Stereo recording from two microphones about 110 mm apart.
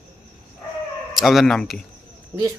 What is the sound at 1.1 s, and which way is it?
Speech, centre (ahead or behind).